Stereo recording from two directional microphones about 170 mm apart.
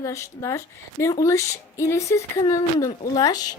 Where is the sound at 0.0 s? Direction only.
15° left (ahead or behind).